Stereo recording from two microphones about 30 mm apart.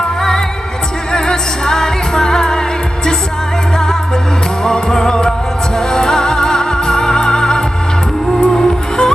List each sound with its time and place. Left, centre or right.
0.2 s music: centre
4.6 s music: left